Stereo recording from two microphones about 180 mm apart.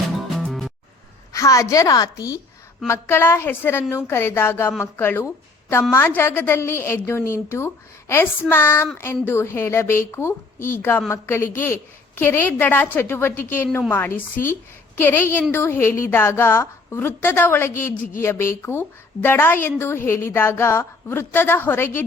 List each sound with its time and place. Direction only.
0.3 s music: centre (ahead or behind)
1.3 s a woman's voice: 15° left (ahead or behind)
14.9 s a woman's voice: 10° left (ahead or behind)